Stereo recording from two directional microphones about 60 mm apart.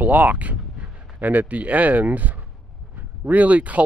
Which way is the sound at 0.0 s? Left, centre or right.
Right.